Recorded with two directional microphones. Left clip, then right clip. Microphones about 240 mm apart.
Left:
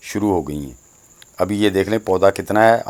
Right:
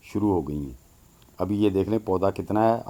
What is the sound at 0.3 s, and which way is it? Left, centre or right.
Speech, left.